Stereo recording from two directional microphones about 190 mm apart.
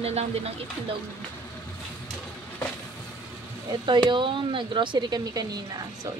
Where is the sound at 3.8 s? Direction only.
25° right (ahead or behind).